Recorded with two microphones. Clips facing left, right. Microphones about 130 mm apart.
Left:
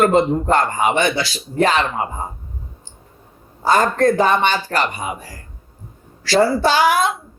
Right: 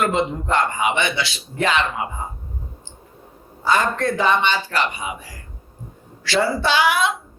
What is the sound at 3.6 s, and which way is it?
Speech, 40° left (ahead or behind).